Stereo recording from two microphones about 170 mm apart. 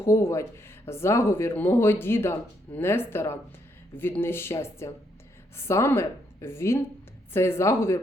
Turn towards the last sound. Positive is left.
turn(degrees=15)  # may be behind; listen again after turning